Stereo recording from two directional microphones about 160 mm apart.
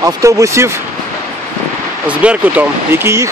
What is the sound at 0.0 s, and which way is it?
Speech, 20° right (ahead or behind).